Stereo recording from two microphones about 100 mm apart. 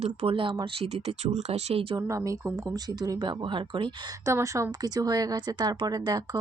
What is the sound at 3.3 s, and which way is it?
Speech, 55° right (ahead or behind).